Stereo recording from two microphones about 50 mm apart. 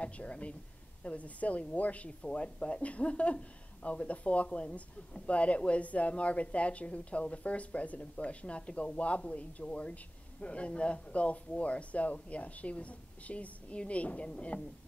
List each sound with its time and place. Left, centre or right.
0.0 s a woman's voice: left